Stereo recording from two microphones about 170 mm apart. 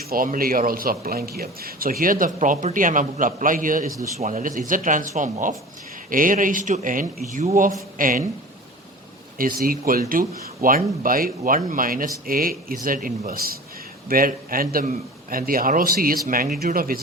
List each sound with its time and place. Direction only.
0.0 s a man's voice: 60° right (ahead or behind)
9.4 s a man's voice: 60° right (ahead or behind)